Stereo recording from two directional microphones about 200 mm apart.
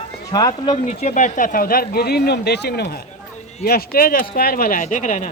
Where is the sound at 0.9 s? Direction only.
35° left (ahead or behind).